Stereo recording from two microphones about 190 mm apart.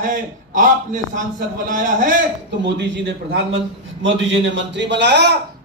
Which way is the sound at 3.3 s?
75° right (ahead or behind).